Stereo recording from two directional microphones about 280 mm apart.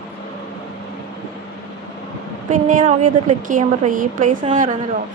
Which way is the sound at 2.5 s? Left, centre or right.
Right.